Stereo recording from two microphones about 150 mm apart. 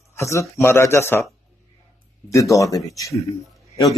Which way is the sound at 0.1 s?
20° left (ahead or behind).